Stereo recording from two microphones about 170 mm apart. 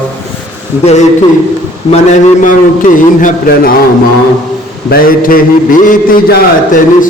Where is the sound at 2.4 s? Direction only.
50° left (ahead or behind).